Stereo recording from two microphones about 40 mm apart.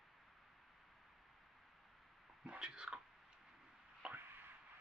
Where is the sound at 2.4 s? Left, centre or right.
Right.